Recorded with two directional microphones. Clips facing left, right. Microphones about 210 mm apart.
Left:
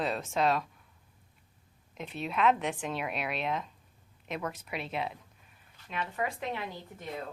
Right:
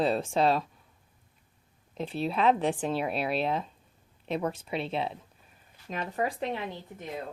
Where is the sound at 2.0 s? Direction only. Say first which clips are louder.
Right 2 dB; 30° right (ahead or behind).